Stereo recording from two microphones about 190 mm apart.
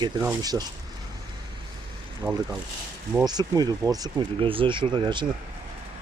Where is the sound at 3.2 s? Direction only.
20° right (ahead or behind).